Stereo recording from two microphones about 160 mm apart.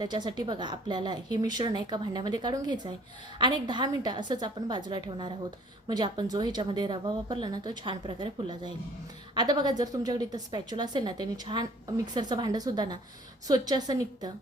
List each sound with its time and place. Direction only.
0.0 s speech: 25° right (ahead or behind)